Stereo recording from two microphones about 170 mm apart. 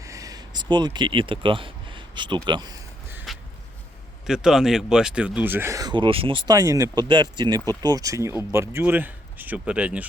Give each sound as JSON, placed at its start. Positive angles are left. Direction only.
{"t": 0.0, "sound": "speech", "side_deg": -20}
{"t": 3.3, "sound": "a sound", "side_deg": 0}
{"t": 4.3, "sound": "speech", "side_deg": -5}